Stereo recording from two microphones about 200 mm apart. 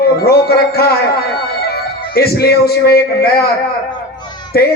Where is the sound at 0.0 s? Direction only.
50° left (ahead or behind).